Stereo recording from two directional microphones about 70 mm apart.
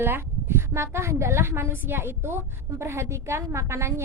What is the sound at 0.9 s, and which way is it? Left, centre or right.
A woman's voice, right.